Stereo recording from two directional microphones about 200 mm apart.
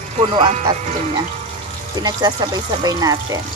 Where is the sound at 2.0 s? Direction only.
20° right (ahead or behind).